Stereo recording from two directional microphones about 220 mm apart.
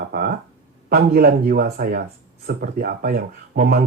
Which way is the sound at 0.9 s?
45° right (ahead or behind).